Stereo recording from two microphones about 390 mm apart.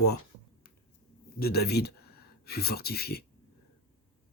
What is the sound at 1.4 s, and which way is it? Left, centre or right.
Speech, left.